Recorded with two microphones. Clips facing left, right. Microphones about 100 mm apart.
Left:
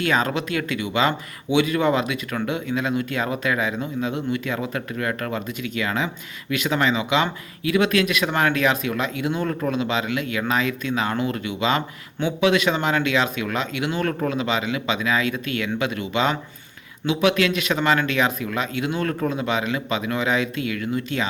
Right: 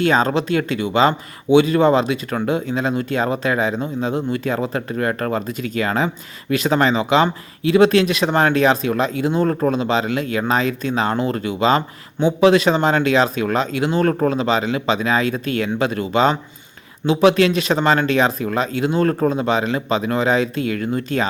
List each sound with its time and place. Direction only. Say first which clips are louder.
0.0 s speech: right 5 dB; 30° right (ahead or behind)